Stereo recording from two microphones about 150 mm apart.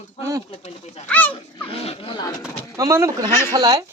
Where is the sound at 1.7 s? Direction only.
40° left (ahead or behind).